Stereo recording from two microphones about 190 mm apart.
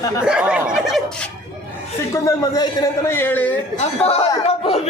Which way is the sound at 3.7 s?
30° left (ahead or behind).